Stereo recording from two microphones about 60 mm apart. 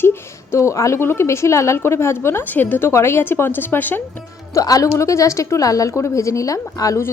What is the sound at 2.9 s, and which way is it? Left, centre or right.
Speech, left.